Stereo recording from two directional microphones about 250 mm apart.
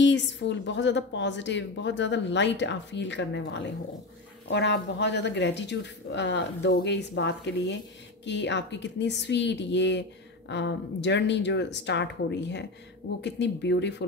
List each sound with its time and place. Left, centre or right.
0.0 s a woman's voice: left